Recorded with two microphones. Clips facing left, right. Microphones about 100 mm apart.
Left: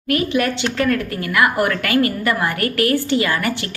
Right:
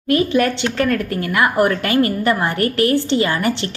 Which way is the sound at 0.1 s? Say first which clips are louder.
Right 3 dB; 30° right (ahead or behind).